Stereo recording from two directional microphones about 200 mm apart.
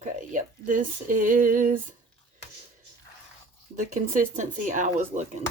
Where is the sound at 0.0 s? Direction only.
40° right (ahead or behind).